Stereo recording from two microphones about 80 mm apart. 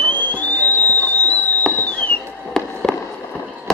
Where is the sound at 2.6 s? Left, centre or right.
Centre.